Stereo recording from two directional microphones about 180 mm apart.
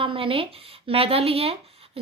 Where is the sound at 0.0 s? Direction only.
30° right (ahead or behind).